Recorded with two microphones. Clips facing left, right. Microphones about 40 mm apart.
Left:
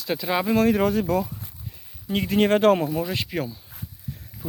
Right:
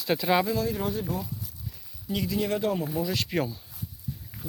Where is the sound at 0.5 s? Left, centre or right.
Left.